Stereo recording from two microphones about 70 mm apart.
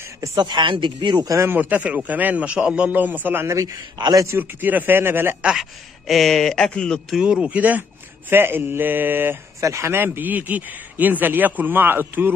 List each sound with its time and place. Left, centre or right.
0.6 s speech: right
1.4 s speech: right
1.7 s speech: centre
3.4 s speech: right
4.4 s speech: right
5.4 s speech: centre
7.2 s speech: centre
8.3 s speech: right
9.6 s speech: right